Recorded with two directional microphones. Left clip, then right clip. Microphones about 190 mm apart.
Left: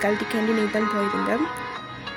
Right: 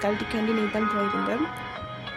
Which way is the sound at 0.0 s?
15° left (ahead or behind).